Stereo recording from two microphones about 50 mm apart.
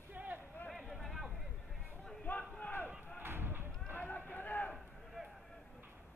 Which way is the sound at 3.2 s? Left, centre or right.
Right.